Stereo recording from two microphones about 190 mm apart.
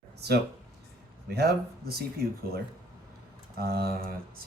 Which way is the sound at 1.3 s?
55° right (ahead or behind).